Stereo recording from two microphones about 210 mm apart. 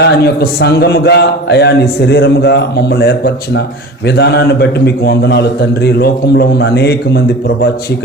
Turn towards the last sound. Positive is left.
turn(degrees=50)  # may be behind; listen again after turning